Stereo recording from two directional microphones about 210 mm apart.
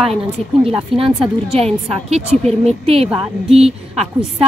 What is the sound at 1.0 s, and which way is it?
A woman's voice, 25° right (ahead or behind).